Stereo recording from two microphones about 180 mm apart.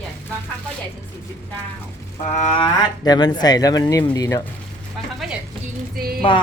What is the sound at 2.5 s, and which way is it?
Speech, 30° left (ahead or behind).